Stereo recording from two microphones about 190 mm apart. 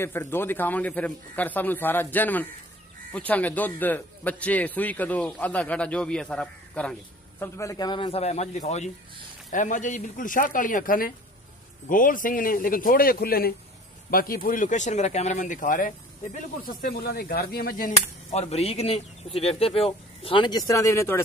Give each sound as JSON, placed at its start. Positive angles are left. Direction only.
{"t": 0.0, "sound": "a man's voice", "side_deg": 10}